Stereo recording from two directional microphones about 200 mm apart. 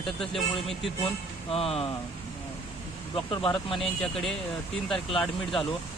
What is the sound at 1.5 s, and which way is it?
Speech, 30° left (ahead or behind).